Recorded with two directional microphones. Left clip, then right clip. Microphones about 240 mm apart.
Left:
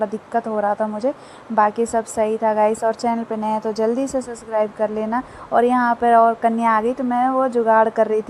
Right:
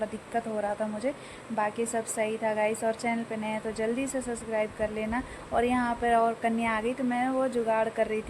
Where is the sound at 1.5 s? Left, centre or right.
Centre.